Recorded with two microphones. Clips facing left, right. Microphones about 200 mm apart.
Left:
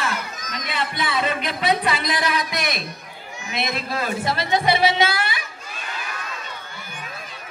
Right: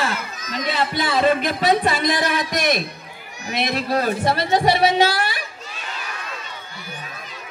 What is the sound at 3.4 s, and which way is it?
A man's voice, 40° right (ahead or behind).